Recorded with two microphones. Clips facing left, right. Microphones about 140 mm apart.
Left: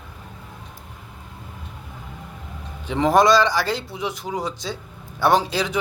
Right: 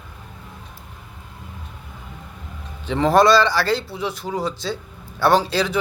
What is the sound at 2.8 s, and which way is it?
A man's voice, 15° left (ahead or behind).